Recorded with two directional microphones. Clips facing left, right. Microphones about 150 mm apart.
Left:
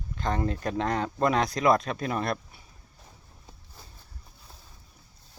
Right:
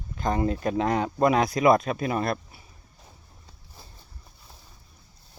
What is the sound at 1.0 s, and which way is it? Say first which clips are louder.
Speech: right 4 dB; 20° right (ahead or behind).